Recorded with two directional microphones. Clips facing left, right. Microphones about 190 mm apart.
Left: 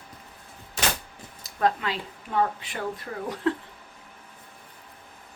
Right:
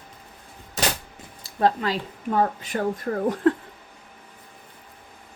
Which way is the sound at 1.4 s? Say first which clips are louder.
Right 3 dB; 35° right (ahead or behind).